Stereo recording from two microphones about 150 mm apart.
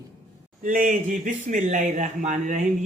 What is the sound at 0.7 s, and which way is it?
A man's voice, 60° right (ahead or behind).